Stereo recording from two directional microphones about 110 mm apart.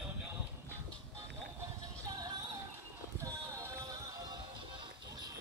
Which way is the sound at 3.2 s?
30° right (ahead or behind).